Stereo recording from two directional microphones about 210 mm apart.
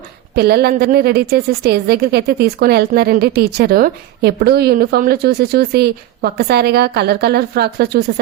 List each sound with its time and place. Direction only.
0.3 s a woman's voice: 50° right (ahead or behind)